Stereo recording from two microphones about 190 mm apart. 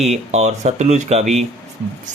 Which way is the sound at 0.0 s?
35° right (ahead or behind).